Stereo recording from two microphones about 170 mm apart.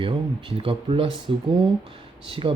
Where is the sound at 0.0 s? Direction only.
30° right (ahead or behind).